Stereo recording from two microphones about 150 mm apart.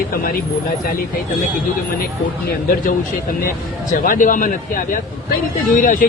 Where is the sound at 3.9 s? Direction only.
65° left (ahead or behind).